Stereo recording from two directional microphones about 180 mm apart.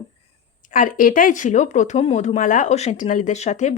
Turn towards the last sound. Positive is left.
turn(degrees=40)  # may be behind; listen again after turning